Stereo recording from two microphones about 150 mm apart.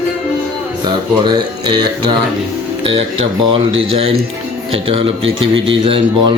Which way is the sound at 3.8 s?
40° right (ahead or behind).